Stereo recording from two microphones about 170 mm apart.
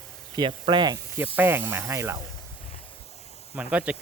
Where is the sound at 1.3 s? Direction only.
10° right (ahead or behind).